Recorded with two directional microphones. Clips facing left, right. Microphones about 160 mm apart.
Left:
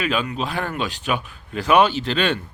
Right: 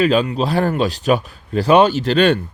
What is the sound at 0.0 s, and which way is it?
Speech, 35° right (ahead or behind).